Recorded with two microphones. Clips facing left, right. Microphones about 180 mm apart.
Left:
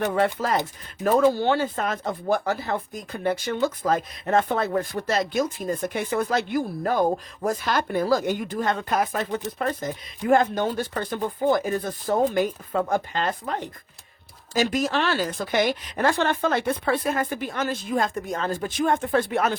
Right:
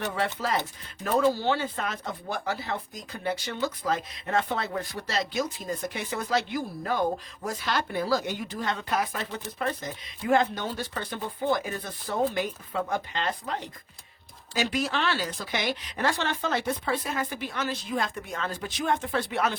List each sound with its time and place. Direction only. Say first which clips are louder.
0.2 s speech: left 3 dB; 45° left (ahead or behind)